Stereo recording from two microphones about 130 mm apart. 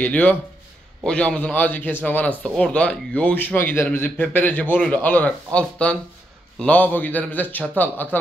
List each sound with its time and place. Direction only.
0.0 s speech: 10° left (ahead or behind)